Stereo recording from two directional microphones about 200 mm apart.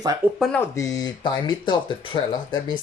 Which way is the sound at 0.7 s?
15° left (ahead or behind).